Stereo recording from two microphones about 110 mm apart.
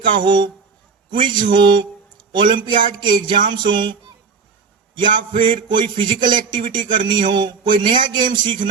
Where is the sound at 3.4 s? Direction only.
45° right (ahead or behind).